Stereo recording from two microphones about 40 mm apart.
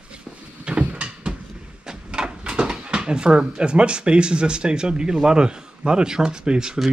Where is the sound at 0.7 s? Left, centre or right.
Right.